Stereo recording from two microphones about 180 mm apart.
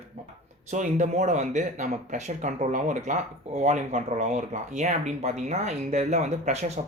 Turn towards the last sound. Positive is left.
turn(degrees=-40)  # may be behind; listen again after turning